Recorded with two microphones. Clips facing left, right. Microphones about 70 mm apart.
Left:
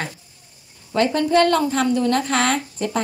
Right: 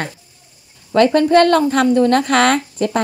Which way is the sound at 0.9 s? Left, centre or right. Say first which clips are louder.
Right 6 dB; right.